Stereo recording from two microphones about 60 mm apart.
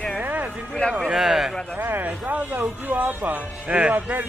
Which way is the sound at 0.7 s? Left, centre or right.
Centre.